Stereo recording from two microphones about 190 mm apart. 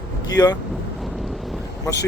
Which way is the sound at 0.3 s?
20° left (ahead or behind).